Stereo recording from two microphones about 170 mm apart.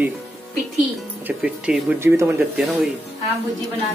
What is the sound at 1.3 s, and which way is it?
Speech, 5° right (ahead or behind).